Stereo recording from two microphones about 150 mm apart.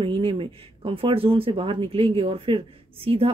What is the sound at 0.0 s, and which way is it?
Speech, 35° right (ahead or behind).